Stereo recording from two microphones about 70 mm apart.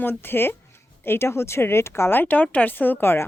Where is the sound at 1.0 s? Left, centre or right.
Left.